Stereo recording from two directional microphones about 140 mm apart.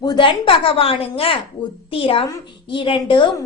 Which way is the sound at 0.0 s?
35° left (ahead or behind).